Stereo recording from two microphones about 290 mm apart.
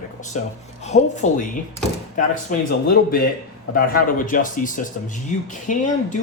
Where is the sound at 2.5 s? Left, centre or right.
Left.